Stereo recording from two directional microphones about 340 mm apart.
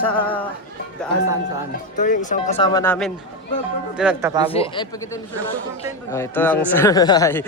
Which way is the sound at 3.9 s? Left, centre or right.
Centre.